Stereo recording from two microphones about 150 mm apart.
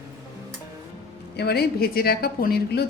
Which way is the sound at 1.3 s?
90° left.